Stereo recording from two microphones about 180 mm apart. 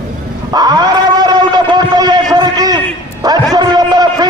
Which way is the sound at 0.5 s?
20° right (ahead or behind).